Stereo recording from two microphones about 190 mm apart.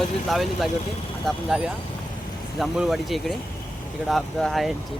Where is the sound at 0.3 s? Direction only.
Centre (ahead or behind).